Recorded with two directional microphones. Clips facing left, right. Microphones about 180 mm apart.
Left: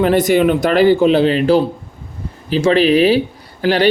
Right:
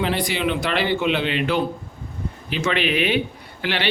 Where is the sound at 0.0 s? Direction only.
45° left (ahead or behind).